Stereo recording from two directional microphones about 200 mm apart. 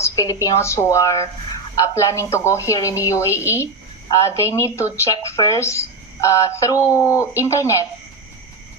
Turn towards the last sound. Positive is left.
turn(degrees=15)  # may be behind; listen again after turning